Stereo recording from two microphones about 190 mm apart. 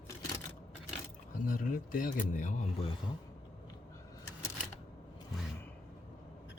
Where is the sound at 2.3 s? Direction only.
40° left (ahead or behind).